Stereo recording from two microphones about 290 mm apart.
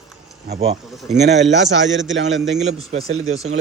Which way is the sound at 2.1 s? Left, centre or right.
Right.